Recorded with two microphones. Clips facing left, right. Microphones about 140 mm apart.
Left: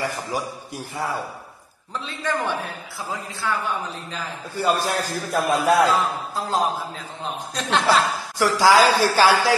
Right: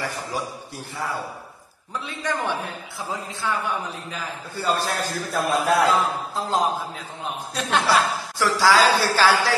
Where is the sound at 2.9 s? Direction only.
Centre (ahead or behind).